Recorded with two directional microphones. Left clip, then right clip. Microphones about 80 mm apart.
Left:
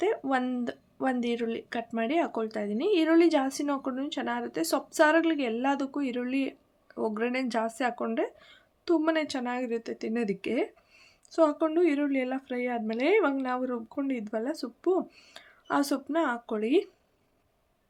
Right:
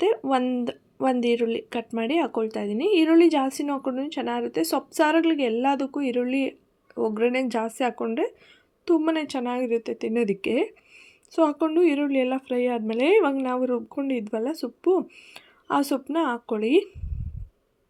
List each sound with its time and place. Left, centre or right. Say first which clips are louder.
0.6 s speech: right 6 dB; right
9.0 s speech: right 3 dB; right